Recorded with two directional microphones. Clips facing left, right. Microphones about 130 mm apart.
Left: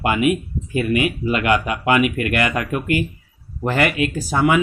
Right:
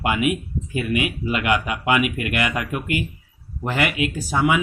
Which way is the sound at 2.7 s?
45° left (ahead or behind).